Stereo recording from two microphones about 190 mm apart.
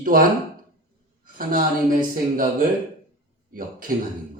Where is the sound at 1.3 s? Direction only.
45° right (ahead or behind).